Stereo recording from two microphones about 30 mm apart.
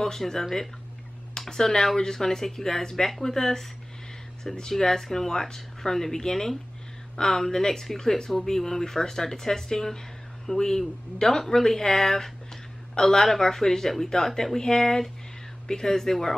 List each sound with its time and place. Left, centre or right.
0.2 s speech: centre
1.5 s speech: left
4.6 s speech: centre